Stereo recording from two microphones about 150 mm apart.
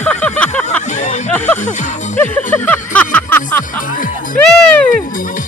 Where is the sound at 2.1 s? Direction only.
10° left (ahead or behind).